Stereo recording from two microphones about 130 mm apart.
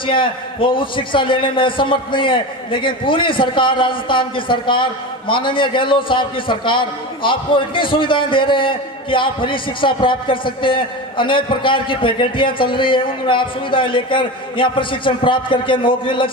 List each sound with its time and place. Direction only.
0.0 s a man's voice: 40° left (ahead or behind)